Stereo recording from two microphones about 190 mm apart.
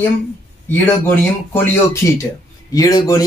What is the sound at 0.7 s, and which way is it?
Speech, 10° left (ahead or behind).